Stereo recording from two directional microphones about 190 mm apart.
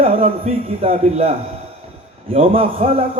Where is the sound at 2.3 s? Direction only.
30° right (ahead or behind).